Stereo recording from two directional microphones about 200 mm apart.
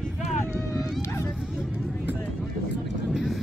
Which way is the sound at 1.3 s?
5° right (ahead or behind).